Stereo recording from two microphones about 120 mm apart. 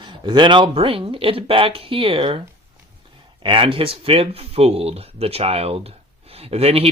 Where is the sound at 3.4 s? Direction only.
45° right (ahead or behind).